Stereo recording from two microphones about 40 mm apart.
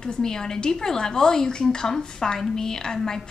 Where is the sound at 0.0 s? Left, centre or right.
Centre.